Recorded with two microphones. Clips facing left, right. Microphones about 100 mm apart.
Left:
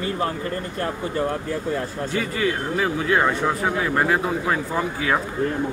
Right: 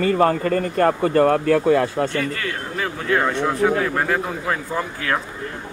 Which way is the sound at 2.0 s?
5° left (ahead or behind).